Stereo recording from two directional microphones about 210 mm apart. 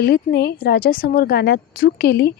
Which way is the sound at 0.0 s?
50° left (ahead or behind).